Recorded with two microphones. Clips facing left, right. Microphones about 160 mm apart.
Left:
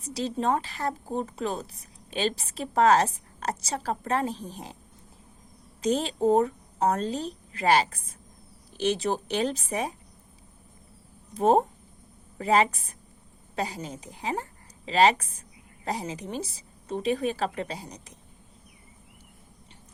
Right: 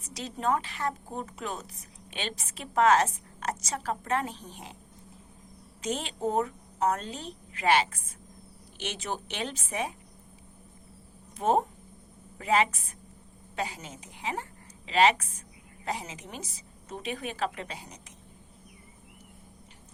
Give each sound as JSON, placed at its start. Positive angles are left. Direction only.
{"t": 0.0, "sound": "a woman's voice", "side_deg": 35}
{"t": 5.8, "sound": "a woman's voice", "side_deg": 35}
{"t": 11.3, "sound": "a woman's voice", "side_deg": 35}